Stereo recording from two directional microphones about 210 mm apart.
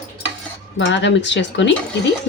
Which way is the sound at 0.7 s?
60° left (ahead or behind).